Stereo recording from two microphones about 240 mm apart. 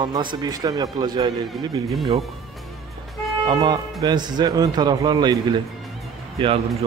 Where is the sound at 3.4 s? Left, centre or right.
Centre.